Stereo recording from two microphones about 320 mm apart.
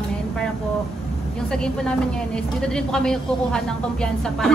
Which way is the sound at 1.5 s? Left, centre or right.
Centre.